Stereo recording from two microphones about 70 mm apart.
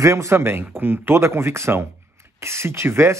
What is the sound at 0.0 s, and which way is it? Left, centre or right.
Speech, right.